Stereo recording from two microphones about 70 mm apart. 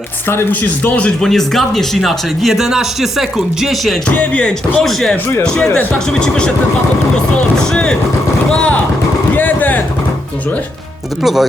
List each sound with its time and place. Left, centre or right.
0.3 s speech: left
1.2 s speech: centre
4.1 s speech: centre
4.8 s speech: centre
7.5 s speech: centre
11.2 s speech: centre